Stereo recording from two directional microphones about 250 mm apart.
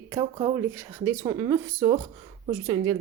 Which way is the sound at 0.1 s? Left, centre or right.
Centre.